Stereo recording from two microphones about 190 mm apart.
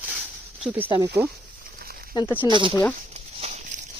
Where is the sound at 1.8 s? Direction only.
55° right (ahead or behind).